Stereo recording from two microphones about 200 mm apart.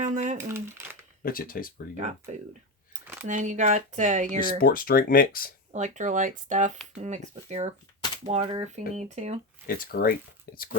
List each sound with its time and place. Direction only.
0.0 s a sound: 40° right (ahead or behind)
0.4 s a sound: 10° right (ahead or behind)
1.2 s speech: 45° left (ahead or behind)
2.3 s speech: 35° right (ahead or behind)
4.6 s speech: 45° left (ahead or behind)
5.7 s speech: 35° right (ahead or behind)
9.6 s speech: 45° left (ahead or behind)